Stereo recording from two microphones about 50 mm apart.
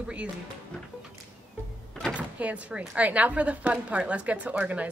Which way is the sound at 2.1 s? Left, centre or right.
Right.